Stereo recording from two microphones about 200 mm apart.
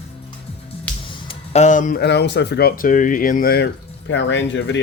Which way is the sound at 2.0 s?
55° left (ahead or behind).